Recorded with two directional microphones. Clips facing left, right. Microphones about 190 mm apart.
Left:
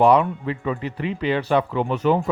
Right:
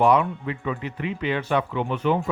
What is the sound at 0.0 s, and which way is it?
Speech, 35° left (ahead or behind).